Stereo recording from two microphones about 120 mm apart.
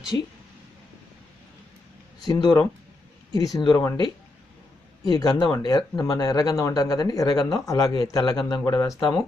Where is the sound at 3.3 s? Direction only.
30° left (ahead or behind).